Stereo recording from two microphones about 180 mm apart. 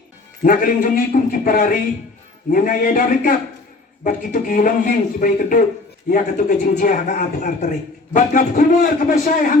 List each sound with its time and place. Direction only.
0.4 s speech: 50° left (ahead or behind)